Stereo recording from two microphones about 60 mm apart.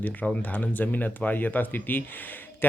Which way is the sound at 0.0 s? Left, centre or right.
Left.